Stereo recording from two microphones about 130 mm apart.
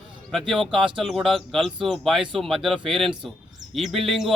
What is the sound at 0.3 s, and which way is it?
A man's voice, 5° left (ahead or behind).